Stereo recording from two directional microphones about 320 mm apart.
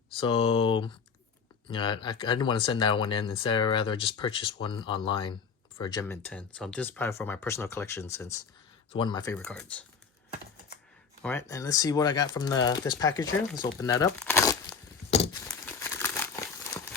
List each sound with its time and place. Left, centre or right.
0.2 s speech: centre
11.2 s speech: centre
15.1 s a sound: centre
15.6 s crumpling: centre